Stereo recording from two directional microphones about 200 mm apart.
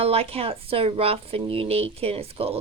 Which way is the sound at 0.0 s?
30° right (ahead or behind).